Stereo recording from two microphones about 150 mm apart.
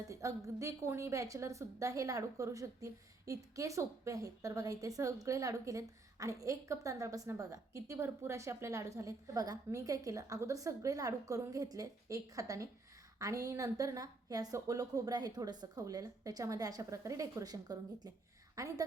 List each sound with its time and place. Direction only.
0.1 s a woman's voice: 20° right (ahead or behind)